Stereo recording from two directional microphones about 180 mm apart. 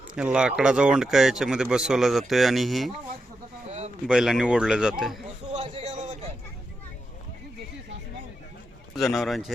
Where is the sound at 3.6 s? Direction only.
35° right (ahead or behind).